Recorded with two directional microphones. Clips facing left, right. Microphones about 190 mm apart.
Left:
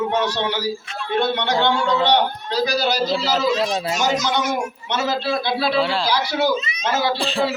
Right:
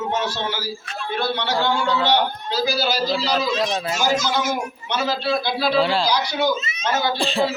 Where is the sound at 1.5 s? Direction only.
5° right (ahead or behind).